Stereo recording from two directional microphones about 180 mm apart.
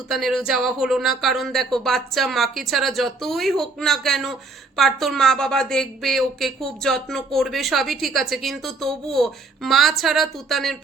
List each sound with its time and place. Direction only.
0.1 s a woman's voice: centre (ahead or behind)